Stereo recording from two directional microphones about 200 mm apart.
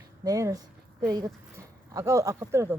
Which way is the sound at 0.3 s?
15° right (ahead or behind).